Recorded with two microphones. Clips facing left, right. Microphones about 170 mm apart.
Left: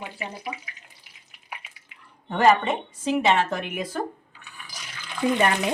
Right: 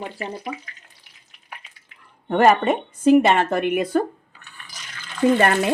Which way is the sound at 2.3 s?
55° right (ahead or behind).